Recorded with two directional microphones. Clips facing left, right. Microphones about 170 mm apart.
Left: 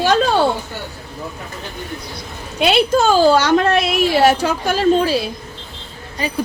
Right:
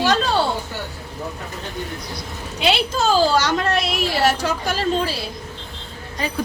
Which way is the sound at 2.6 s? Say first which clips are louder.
Left 6 dB; 55° left (ahead or behind).